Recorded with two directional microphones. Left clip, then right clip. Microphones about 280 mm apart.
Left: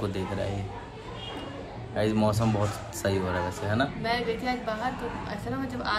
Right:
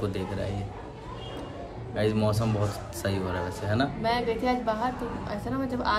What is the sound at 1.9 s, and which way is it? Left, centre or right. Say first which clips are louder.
A man's voice: left 1 dB; centre.